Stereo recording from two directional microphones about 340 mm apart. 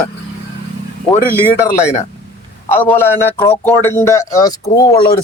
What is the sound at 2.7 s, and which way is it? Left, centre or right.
Speech, centre.